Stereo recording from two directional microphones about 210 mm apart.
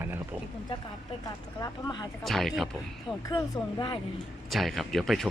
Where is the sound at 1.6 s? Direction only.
20° left (ahead or behind).